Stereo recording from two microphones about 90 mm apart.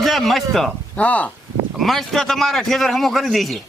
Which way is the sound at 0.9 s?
15° left (ahead or behind).